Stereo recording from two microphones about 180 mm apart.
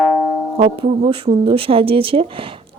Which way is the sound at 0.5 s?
30° right (ahead or behind).